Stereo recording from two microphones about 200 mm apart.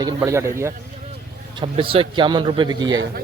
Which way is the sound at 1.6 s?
25° right (ahead or behind).